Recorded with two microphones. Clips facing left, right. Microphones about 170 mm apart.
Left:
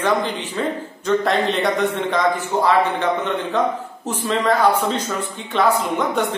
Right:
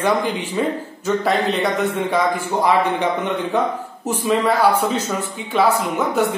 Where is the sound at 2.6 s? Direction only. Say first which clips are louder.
Right 1 dB; 15° right (ahead or behind).